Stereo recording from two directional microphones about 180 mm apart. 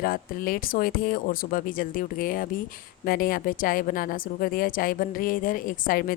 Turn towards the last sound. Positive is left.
turn(degrees=50)  # may be behind; listen again after turning